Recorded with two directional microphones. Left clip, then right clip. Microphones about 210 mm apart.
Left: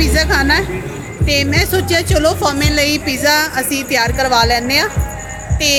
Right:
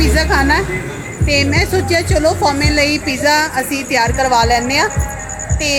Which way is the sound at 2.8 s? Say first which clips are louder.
Even; 40° left (ahead or behind).